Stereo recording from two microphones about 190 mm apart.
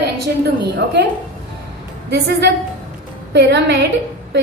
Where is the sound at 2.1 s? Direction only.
60° right (ahead or behind).